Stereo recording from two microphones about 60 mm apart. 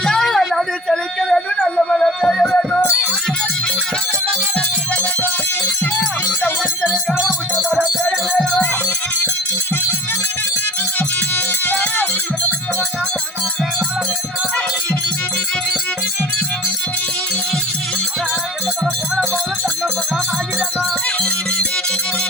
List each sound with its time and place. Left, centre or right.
0.0 s a sound: centre
1.7 s music: centre
7.5 s music: right
8.3 s music: centre
11.6 s music: left